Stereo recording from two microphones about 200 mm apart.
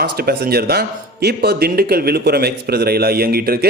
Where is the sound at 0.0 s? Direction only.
50° right (ahead or behind).